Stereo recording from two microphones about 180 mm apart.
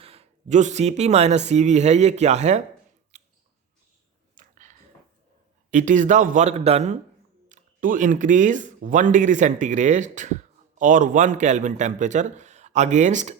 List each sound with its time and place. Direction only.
0.0 s speech: 35° right (ahead or behind)
3.1 s mouse: 40° right (ahead or behind)
4.4 s a sound: 40° right (ahead or behind)
5.7 s speech: 45° right (ahead or behind)